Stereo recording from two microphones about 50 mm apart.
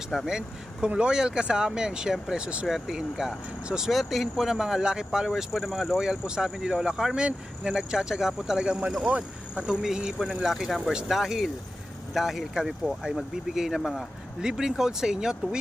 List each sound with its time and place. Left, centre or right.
0.1 s speech: centre
0.4 s speech: centre
3.9 s speech: centre
9.0 s speech: right
9.8 s speech: centre
13.7 s speech: centre
14.4 s speech: centre